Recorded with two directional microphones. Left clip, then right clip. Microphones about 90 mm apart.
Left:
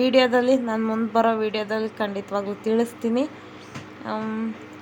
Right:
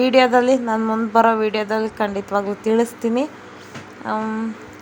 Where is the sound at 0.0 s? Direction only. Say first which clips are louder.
Right 4 dB; 30° right (ahead or behind).